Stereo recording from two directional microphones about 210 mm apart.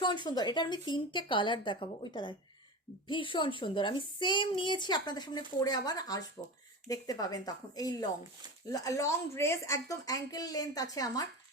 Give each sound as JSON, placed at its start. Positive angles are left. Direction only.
{"t": 0.0, "sound": "a woman's voice", "side_deg": 20}